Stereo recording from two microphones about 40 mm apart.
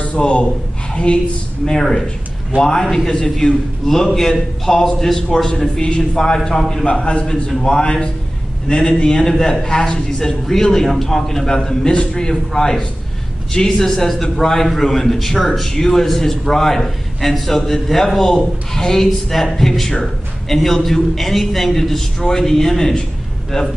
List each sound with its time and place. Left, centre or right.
0.2 s a man's voice: left
1.7 s a man's voice: centre
5.8 s a man's voice: centre
6.9 s a man's voice: left
23.5 s a man's voice: left